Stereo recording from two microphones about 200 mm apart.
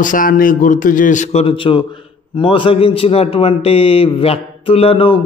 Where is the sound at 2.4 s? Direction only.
25° left (ahead or behind).